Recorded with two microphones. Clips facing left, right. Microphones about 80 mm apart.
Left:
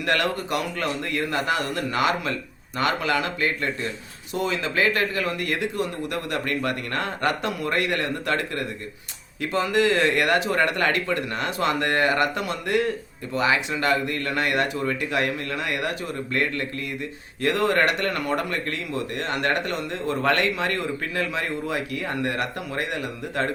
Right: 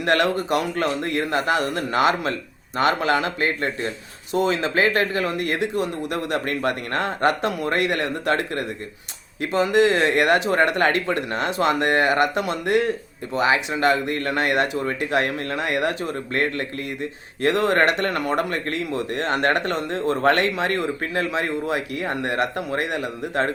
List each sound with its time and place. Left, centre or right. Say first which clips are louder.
0.0 s speech: right 4 dB; right